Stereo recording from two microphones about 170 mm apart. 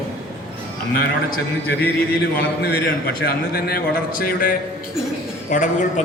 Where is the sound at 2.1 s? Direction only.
65° left (ahead or behind).